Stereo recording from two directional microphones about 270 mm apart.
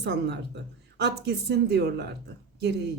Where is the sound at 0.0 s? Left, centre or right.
Right.